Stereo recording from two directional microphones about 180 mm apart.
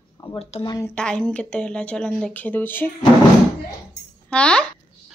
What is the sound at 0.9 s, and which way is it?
Speech, 5° left (ahead or behind).